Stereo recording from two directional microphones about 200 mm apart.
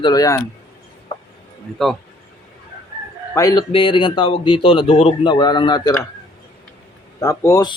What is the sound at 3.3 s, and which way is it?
A man's voice, 15° left (ahead or behind).